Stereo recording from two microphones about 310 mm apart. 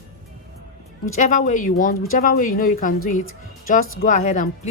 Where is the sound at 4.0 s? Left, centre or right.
Left.